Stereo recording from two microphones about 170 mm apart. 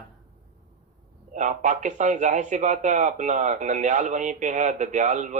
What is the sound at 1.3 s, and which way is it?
Speech, 45° right (ahead or behind).